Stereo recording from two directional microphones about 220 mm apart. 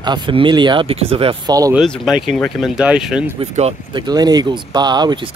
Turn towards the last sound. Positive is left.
turn(degrees=-20)  # may be behind; listen again after turning